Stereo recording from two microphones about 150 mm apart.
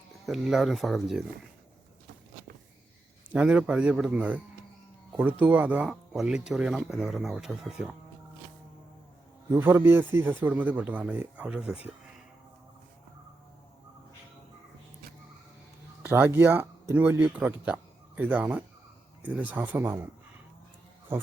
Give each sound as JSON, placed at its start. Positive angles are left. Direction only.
{"t": 0.3, "sound": "speech", "side_deg": 0}
{"t": 3.2, "sound": "a man's voice", "side_deg": -10}
{"t": 9.5, "sound": "a man's voice", "side_deg": -15}
{"t": 16.0, "sound": "a man's voice", "side_deg": -15}
{"t": 21.1, "sound": "speech", "side_deg": -15}